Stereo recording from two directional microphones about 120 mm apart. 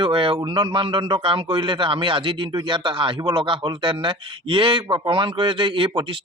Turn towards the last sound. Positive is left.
turn(degrees=-45)  # may be behind; listen again after turning